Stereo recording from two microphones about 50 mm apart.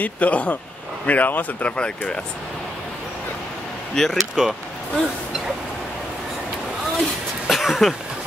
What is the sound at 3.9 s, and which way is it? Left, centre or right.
Speech, centre.